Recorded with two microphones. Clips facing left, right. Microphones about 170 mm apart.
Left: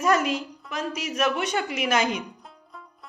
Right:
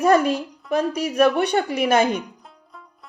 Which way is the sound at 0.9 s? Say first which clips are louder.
Right 6 dB; 60° right (ahead or behind).